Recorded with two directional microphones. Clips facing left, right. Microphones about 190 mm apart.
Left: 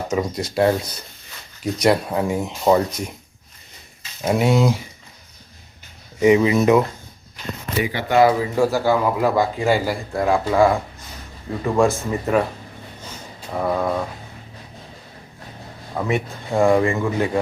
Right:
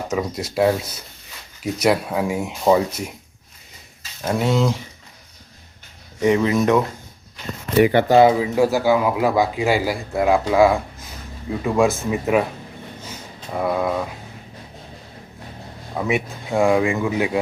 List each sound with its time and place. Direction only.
0.1 s speech: centre (ahead or behind)
4.2 s speech: 10° left (ahead or behind)
6.1 s speech: 5° left (ahead or behind)
7.8 s speech: 60° right (ahead or behind)
8.0 s speech: 30° right (ahead or behind)
8.3 s a man's voice: 10° right (ahead or behind)
13.5 s speech: 5° right (ahead or behind)
16.0 s speech: 5° right (ahead or behind)